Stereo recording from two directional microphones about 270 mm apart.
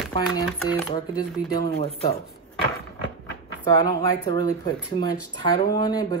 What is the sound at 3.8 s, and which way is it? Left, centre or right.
Speech, centre.